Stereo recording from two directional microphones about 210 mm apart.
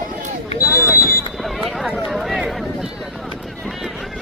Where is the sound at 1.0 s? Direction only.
15° left (ahead or behind).